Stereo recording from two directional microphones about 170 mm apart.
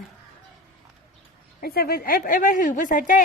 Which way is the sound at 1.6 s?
65° left (ahead or behind).